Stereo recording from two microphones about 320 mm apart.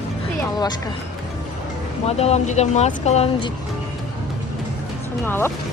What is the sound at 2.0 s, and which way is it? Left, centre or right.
Speech, centre.